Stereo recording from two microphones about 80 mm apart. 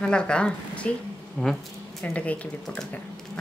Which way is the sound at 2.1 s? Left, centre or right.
Centre.